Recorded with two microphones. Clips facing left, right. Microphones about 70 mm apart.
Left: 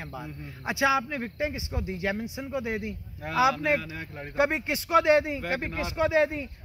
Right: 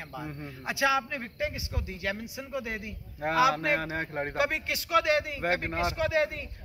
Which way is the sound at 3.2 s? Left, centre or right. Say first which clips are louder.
Even; right.